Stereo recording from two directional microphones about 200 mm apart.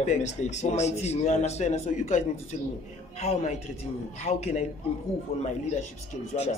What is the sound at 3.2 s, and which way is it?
Speech, 35° left (ahead or behind).